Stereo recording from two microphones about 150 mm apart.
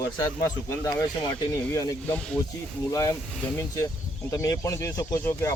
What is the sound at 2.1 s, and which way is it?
Speech, 5° left (ahead or behind).